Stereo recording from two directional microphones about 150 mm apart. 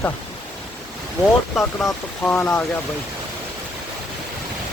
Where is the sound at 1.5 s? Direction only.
5° left (ahead or behind).